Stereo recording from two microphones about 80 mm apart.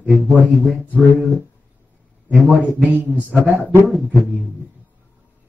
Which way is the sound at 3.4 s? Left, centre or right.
Left.